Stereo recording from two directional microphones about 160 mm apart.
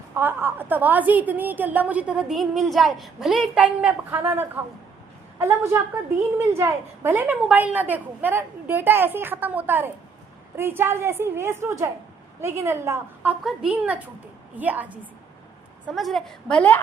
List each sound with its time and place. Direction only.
0.1 s a woman's voice: 15° right (ahead or behind)
13.4 s a woman's voice: 5° right (ahead or behind)
16.0 s a woman's voice: centre (ahead or behind)